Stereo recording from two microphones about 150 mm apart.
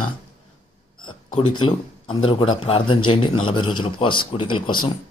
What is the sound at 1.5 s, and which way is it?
Speech, 35° left (ahead or behind).